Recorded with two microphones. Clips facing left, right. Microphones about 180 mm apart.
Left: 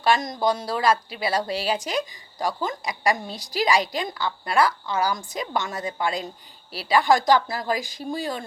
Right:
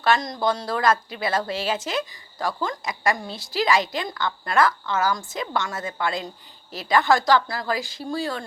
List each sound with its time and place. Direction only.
0.0 s a woman's voice: 15° left (ahead or behind)